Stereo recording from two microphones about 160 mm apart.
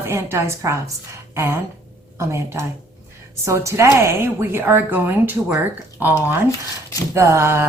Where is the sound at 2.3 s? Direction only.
15° right (ahead or behind).